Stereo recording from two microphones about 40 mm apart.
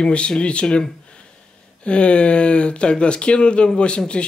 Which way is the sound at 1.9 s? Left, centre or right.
Left.